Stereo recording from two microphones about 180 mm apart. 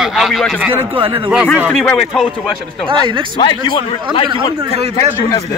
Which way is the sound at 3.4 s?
25° left (ahead or behind).